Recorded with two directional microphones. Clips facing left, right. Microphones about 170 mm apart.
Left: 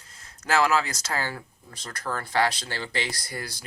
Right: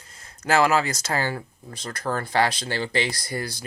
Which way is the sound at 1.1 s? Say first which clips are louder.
Right 4 dB; 30° right (ahead or behind).